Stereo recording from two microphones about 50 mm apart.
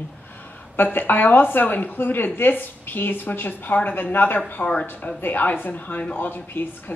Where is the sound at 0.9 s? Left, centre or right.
Left.